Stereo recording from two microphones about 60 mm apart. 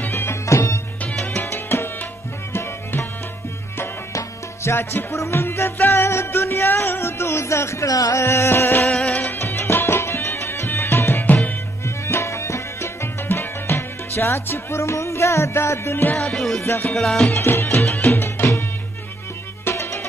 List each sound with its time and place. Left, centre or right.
0.0 s music: left
1.3 s music: left
4.6 s music: left
5.1 s music: left
7.8 s music: left
8.2 s music: left
8.8 s music: centre
9.4 s music: left
16.2 s music: centre
16.6 s music: left
16.9 s music: centre
17.3 s music: left
19.7 s music: left